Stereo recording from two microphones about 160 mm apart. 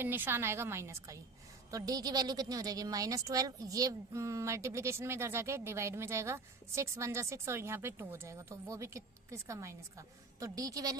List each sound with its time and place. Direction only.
0.0 s a woman's voice: 15° right (ahead or behind)